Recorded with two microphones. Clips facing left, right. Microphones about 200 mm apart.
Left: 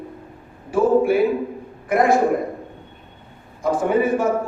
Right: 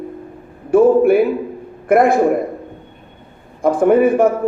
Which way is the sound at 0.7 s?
55° right (ahead or behind).